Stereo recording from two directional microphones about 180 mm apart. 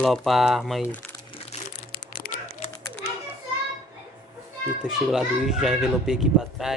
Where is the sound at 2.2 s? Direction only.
55° left (ahead or behind).